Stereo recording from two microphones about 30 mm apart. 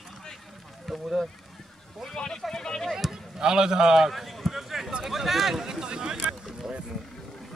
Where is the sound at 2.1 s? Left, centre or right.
Left.